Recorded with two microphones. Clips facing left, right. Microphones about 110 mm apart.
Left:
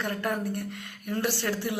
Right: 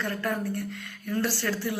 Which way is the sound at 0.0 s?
20° left (ahead or behind).